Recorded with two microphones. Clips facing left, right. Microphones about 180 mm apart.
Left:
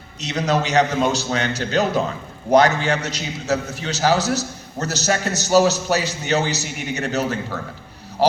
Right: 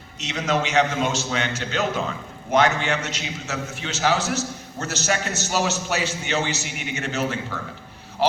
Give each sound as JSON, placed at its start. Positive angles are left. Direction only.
{"t": 0.2, "sound": "a man's voice", "side_deg": 35}